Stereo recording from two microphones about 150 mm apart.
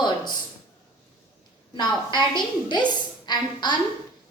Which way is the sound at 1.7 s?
30° left (ahead or behind).